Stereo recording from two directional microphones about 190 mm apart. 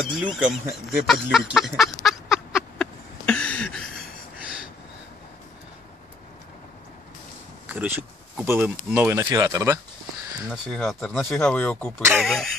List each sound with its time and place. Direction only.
0.0 s a sound: 5° right (ahead or behind)
7.6 s speech: 10° right (ahead or behind)
10.5 s speech: centre (ahead or behind)